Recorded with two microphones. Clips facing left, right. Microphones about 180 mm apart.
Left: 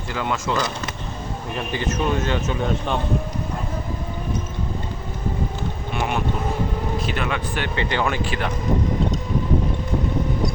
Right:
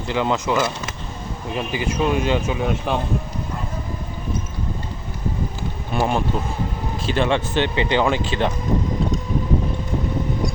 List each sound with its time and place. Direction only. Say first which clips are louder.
0.1 s a man's voice: right 4 dB; 20° right (ahead or behind)
6.0 s a man's voice: right 3 dB; 35° right (ahead or behind)